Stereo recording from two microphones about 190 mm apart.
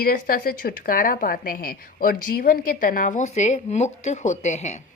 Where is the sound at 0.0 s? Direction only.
50° left (ahead or behind).